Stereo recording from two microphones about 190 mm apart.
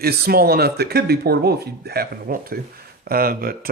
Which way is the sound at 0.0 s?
55° right (ahead or behind).